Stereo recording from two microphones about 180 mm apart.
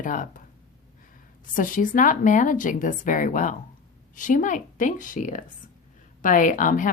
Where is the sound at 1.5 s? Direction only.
50° left (ahead or behind).